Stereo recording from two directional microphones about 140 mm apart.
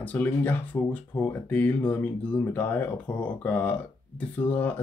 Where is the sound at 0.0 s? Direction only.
10° left (ahead or behind).